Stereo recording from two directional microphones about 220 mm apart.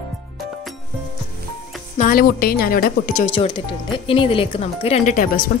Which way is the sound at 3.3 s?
25° left (ahead or behind).